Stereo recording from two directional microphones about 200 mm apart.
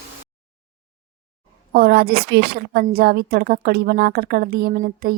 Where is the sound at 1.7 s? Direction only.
50° right (ahead or behind).